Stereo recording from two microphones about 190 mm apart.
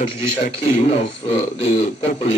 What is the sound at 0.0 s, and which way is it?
A man's voice, 30° left (ahead or behind).